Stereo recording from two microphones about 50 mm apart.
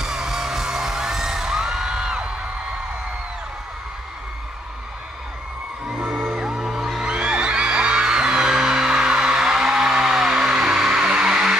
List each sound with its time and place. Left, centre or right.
0.0 s music: centre
5.9 s music: centre
7.1 s music: centre